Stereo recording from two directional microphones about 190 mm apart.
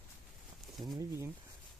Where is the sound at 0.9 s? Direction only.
15° right (ahead or behind).